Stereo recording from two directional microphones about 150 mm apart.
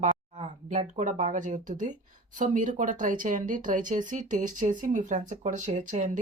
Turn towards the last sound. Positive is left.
turn(degrees=-55)  # may be behind; listen again after turning